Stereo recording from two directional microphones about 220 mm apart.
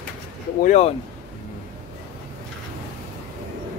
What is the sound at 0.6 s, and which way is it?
Speech, 30° left (ahead or behind).